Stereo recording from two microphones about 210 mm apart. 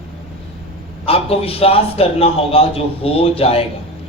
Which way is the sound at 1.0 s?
25° left (ahead or behind).